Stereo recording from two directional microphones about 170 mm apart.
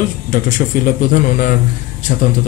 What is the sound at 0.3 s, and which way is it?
Speech, 55° left (ahead or behind).